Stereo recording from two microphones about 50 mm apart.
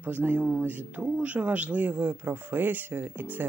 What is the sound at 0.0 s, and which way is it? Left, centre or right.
Speech, right.